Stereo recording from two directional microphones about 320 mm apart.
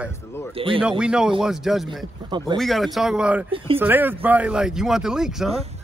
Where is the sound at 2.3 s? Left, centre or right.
Centre.